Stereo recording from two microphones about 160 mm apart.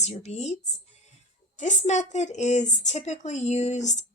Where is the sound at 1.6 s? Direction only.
50° left (ahead or behind).